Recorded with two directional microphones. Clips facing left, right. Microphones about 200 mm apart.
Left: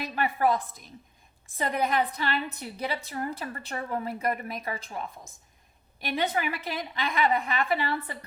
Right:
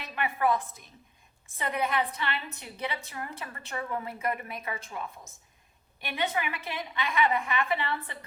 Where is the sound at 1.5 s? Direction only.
35° left (ahead or behind).